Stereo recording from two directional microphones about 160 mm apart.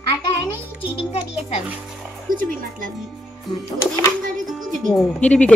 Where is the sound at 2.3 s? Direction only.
60° right (ahead or behind).